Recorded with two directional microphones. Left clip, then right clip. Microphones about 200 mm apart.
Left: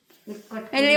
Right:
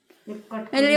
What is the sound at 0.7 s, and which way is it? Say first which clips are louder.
Speech: even; 20° right (ahead or behind).